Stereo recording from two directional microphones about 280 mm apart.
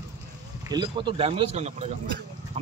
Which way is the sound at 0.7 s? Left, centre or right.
Centre.